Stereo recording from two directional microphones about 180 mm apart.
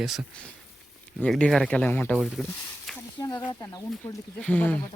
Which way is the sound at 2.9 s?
5° left (ahead or behind).